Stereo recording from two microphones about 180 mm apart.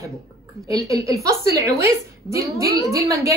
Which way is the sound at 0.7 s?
20° right (ahead or behind).